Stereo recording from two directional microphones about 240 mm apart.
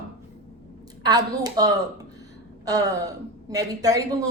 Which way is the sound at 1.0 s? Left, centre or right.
Centre.